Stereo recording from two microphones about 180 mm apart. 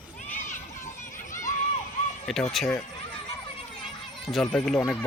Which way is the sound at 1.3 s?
45° left (ahead or behind).